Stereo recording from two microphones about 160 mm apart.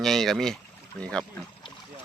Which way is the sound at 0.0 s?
Centre (ahead or behind).